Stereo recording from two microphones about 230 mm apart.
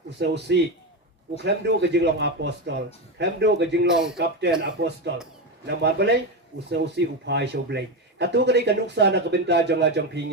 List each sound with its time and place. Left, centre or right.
0.2 s speech: right